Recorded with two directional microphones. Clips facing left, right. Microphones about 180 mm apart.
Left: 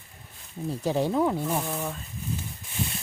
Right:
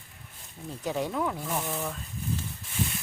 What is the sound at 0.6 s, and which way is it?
Speech, 30° left (ahead or behind).